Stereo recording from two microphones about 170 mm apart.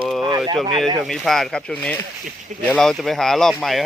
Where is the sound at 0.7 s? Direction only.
30° right (ahead or behind).